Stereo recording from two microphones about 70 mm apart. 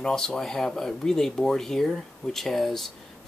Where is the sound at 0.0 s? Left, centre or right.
Centre.